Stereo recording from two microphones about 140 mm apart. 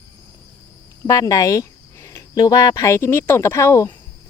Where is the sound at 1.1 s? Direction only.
25° left (ahead or behind).